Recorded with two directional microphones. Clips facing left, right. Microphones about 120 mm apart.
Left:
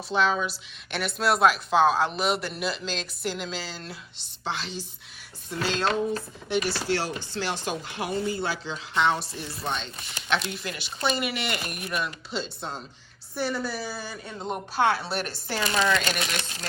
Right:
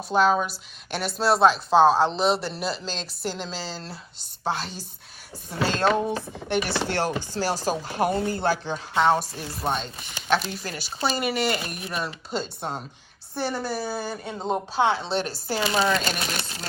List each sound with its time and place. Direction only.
0.1 s a woman's voice: 45° right (ahead or behind)
6.5 s chopping: 55° right (ahead or behind)
7.3 s a woman's voice: 40° right (ahead or behind)
8.1 s a woman's voice: 55° right (ahead or behind); by 12.1 s 30° right (ahead or behind)
12.3 s speech: 50° right (ahead or behind)
14.3 s speech: 30° right (ahead or behind)